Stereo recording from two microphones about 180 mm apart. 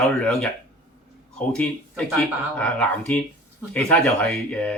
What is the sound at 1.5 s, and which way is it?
Speech, 5° left (ahead or behind).